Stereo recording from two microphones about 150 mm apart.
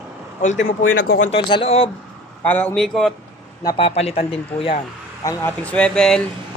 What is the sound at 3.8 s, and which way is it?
Speech, 40° left (ahead or behind).